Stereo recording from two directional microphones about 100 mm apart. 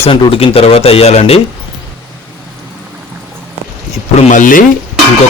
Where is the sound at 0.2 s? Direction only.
65° left (ahead or behind); by 1.4 s 90° left.